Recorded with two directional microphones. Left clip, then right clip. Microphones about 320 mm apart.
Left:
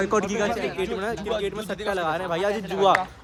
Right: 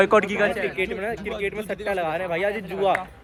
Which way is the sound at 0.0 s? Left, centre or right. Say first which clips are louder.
Right 5 dB; centre.